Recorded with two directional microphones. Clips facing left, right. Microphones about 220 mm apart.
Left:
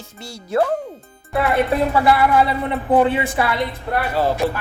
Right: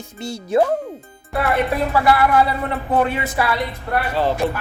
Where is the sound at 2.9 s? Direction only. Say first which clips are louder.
Left 4 dB; 20° left (ahead or behind).